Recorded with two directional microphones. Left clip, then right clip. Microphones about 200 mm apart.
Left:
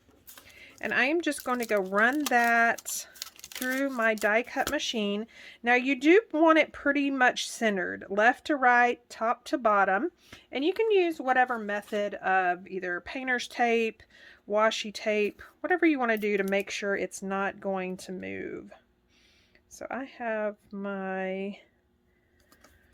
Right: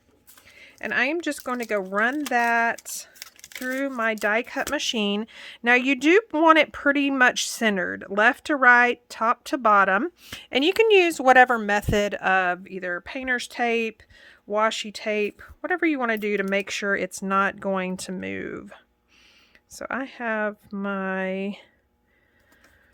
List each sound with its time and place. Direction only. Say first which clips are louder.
0.4 s speech: right 2 dB; 20° right (ahead or behind)
3.2 s crumpling: right 1 dB; 5° right (ahead or behind)
3.6 s speech: right 2 dB; 15° right (ahead or behind); by 21.7 s 35° right (ahead or behind)